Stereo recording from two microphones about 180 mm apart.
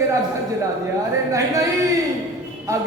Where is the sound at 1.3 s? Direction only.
20° right (ahead or behind).